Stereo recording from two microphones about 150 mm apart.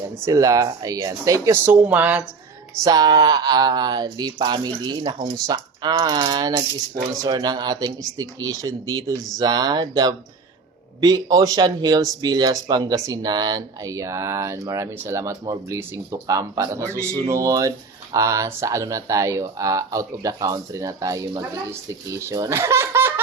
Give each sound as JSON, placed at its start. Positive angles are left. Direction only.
{"t": 0.3, "sound": "speech", "side_deg": -25}
{"t": 2.8, "sound": "speech", "side_deg": -25}